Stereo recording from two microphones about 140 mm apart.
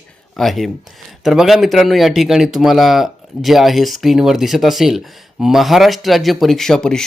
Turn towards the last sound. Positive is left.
turn(degrees=5)  # may be behind; listen again after turning